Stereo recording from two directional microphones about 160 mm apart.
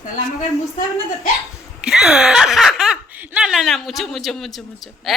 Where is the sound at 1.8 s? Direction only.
5° right (ahead or behind).